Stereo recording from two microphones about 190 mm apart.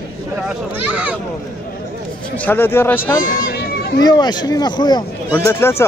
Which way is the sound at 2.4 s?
10° left (ahead or behind).